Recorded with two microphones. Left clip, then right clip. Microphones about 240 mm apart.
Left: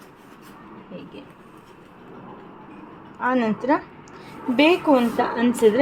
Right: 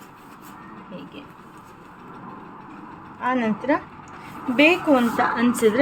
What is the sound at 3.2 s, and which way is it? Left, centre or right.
A woman's voice, centre.